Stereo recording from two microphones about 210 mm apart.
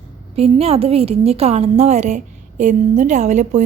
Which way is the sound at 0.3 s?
30° right (ahead or behind).